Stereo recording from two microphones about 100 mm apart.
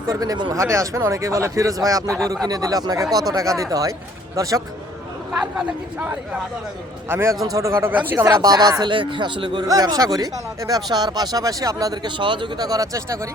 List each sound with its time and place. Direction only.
0.1 s speech: 40° right (ahead or behind)
0.5 s speech: 30° right (ahead or behind)
2.0 s speech: 5° left (ahead or behind)
2.5 s speech: 40° right (ahead or behind)
5.4 s speech: 10° right (ahead or behind)
7.1 s speech: 25° right (ahead or behind)
8.4 s speech: 40° right (ahead or behind)
9.6 s speech: 40° right (ahead or behind)
12.0 s speech: 55° right (ahead or behind); by 13.1 s 35° right (ahead or behind)